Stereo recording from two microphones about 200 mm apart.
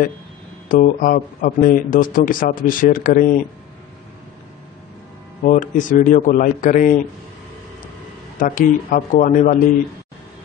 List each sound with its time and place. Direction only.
0.7 s speech: 45° left (ahead or behind)
5.4 s a man's voice: 40° left (ahead or behind)
8.4 s a man's voice: 45° left (ahead or behind)